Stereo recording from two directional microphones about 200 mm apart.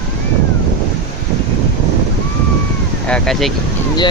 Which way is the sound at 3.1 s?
5° left (ahead or behind).